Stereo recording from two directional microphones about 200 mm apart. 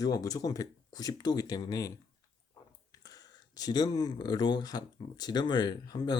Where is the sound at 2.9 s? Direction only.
20° left (ahead or behind).